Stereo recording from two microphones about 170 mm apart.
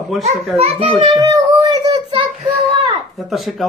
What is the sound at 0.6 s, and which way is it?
Speech, 35° right (ahead or behind).